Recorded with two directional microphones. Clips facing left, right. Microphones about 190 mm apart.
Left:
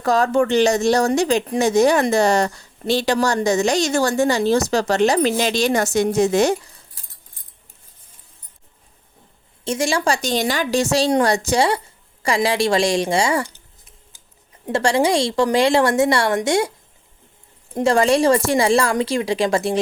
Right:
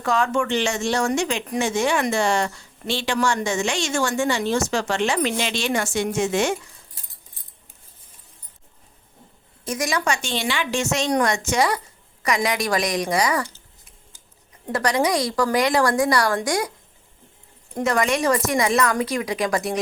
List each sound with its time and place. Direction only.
0.0 s speech: 35° left (ahead or behind)
9.6 s speech: 30° left (ahead or behind)
14.7 s speech: 25° left (ahead or behind)
17.7 s speech: 30° left (ahead or behind)